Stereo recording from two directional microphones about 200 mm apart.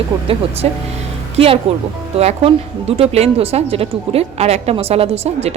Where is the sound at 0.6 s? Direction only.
30° right (ahead or behind).